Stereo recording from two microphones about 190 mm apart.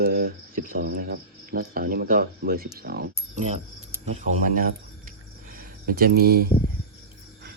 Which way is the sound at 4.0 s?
35° right (ahead or behind).